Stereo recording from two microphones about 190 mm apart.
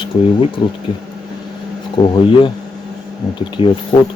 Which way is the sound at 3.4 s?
25° left (ahead or behind).